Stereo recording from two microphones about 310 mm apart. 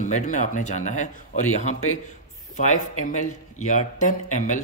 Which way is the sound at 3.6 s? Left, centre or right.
Left.